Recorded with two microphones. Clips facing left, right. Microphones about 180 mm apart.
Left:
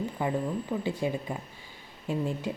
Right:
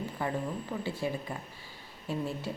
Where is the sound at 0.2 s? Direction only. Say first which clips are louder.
Left 3 dB; 15° left (ahead or behind).